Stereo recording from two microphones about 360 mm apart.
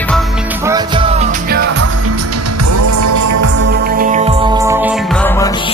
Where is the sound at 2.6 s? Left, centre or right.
Right.